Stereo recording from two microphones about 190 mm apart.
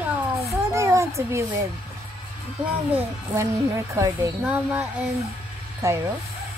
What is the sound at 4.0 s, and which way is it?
Speech, 15° right (ahead or behind).